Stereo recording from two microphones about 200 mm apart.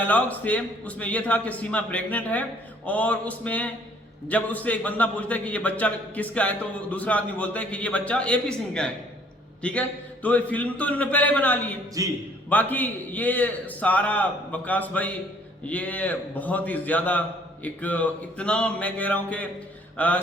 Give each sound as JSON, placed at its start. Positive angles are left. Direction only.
{"t": 0.0, "sound": "a man's voice", "side_deg": 10}
{"t": 12.0, "sound": "a man's voice", "side_deg": -15}
{"t": 12.5, "sound": "a man's voice", "side_deg": 10}